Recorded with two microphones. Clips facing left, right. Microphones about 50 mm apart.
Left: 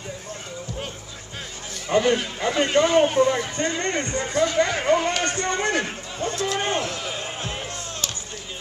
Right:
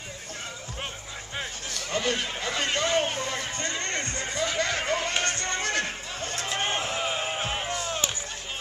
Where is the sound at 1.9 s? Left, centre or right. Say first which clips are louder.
Left 8 dB; centre.